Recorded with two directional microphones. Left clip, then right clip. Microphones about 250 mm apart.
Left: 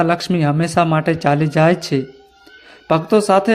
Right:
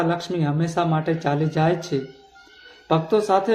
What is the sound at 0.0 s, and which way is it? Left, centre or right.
Speech, left.